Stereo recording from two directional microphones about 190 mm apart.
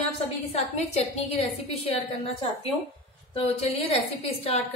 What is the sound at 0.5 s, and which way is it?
A woman's voice, 35° left (ahead or behind).